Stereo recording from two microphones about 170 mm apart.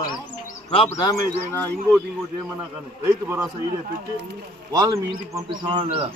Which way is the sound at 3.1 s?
15° right (ahead or behind).